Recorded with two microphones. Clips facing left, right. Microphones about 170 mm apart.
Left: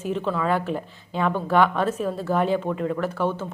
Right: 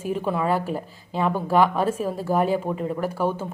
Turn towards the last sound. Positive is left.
turn(degrees=-10)  # may be behind; listen again after turning